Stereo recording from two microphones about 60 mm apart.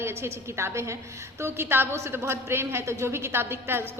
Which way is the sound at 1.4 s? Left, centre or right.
Right.